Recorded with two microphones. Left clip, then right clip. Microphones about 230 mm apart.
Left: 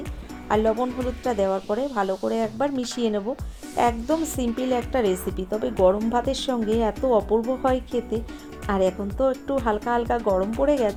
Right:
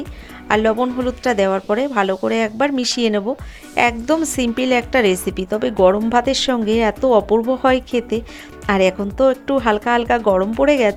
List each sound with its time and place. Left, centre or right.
0.4 s speech: right